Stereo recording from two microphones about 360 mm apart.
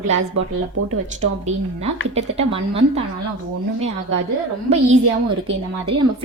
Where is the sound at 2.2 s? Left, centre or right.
Centre.